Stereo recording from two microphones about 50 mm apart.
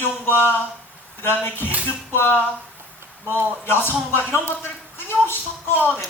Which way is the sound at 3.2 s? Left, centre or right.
Left.